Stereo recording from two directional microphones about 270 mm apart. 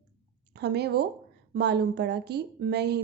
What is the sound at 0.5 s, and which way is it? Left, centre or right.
A woman's voice, right.